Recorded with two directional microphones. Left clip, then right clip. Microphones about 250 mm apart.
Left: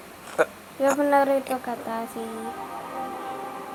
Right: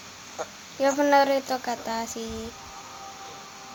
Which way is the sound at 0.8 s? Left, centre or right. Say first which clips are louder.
Even; centre.